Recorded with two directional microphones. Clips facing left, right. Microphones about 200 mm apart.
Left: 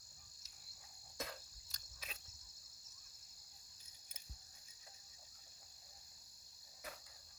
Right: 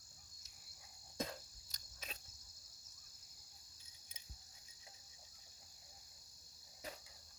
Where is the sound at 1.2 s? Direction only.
20° right (ahead or behind).